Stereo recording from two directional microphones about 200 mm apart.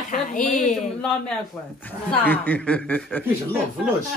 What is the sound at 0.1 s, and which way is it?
Speech, 40° left (ahead or behind).